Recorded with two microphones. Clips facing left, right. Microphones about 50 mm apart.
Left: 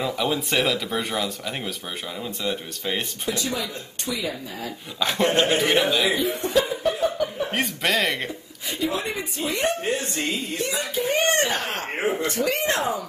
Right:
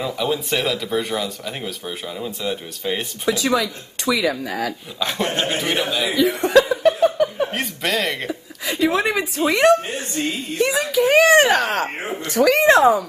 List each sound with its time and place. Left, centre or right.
0.0 s speech: centre
3.3 s speech: right
5.0 s speech: centre
6.1 s chuckle: right
7.5 s chuckle: centre
8.3 s a woman's voice: right
10.6 s speech: right